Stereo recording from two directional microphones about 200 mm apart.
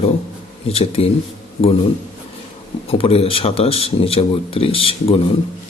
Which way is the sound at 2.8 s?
30° left (ahead or behind).